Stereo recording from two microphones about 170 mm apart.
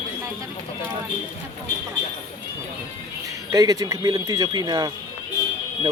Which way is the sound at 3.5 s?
20° right (ahead or behind).